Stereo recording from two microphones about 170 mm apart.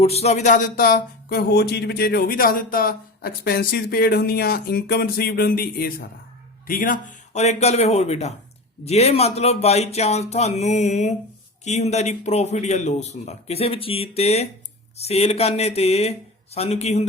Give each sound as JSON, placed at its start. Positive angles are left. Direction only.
{"t": 0.0, "sound": "speech", "side_deg": 40}